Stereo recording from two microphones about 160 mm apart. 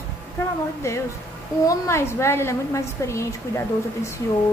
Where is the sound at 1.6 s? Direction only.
15° left (ahead or behind).